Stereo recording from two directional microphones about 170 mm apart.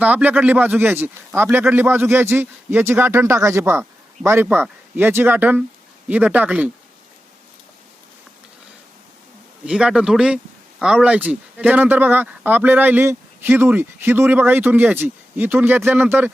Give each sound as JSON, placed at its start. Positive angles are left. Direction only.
{"t": 0.0, "sound": "speech", "side_deg": -10}
{"t": 9.6, "sound": "speech", "side_deg": -5}